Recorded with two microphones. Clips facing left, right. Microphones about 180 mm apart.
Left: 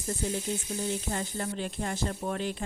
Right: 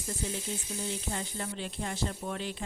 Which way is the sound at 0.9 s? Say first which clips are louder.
Left 3 dB; 50° left (ahead or behind).